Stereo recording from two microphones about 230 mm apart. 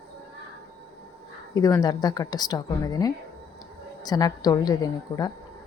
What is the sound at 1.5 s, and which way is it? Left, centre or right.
A woman's voice, centre.